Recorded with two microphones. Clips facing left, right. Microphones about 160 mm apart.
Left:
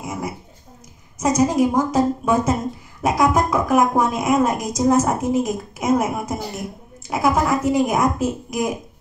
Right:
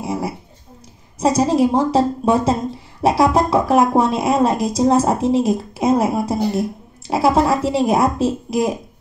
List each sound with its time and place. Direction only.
0.0 s dog: 30° right (ahead or behind)
1.2 s a woman's voice: 30° right (ahead or behind)